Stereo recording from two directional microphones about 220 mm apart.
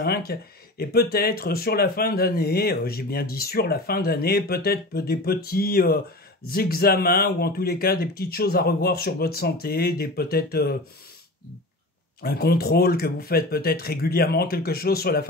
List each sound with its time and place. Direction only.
0.0 s speech: 45° left (ahead or behind)
12.2 s speech: 45° left (ahead or behind)